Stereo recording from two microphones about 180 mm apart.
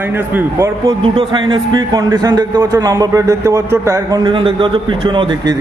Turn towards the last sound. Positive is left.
turn(degrees=-25)  # may be behind; listen again after turning